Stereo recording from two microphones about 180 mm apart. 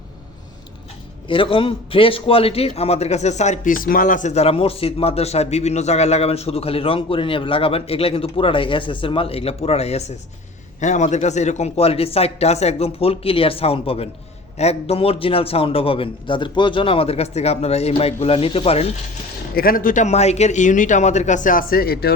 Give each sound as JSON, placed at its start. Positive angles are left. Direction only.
{"t": 1.3, "sound": "a man's voice", "side_deg": 30}
{"t": 19.5, "sound": "speech", "side_deg": 55}